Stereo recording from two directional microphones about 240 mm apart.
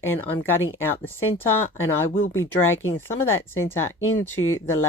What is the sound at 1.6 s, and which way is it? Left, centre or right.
Speech, left.